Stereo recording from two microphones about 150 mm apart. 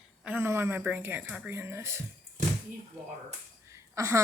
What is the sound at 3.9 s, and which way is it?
Speech, 20° right (ahead or behind).